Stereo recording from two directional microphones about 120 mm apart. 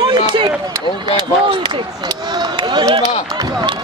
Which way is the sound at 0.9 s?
40° right (ahead or behind).